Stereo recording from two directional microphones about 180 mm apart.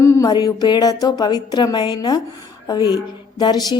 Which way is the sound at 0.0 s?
15° left (ahead or behind).